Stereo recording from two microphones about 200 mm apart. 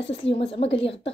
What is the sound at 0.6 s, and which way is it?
Speech, 30° left (ahead or behind).